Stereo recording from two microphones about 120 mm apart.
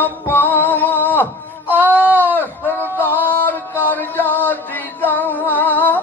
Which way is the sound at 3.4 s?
15° left (ahead or behind).